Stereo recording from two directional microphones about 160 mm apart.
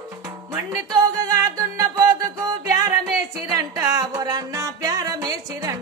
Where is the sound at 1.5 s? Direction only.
20° right (ahead or behind).